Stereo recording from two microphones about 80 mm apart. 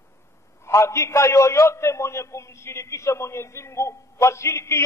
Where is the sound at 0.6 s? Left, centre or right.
Left.